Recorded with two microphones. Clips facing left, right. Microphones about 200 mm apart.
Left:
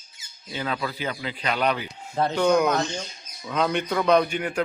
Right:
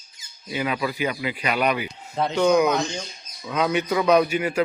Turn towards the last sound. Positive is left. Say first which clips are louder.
# right 2 dB
turn(degrees=-5)  # may be behind; listen again after turning